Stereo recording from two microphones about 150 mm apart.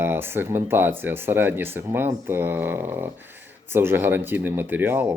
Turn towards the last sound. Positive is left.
turn(degrees=-15)  # may be behind; listen again after turning